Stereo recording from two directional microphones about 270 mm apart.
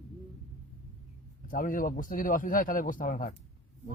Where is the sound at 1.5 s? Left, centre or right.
Left.